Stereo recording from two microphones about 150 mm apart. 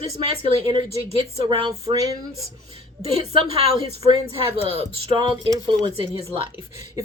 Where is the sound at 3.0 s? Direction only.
40° right (ahead or behind).